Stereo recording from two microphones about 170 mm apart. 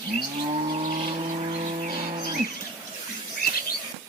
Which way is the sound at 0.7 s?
45° right (ahead or behind).